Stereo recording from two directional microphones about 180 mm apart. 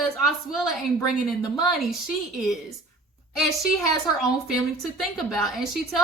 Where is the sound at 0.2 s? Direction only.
Centre (ahead or behind).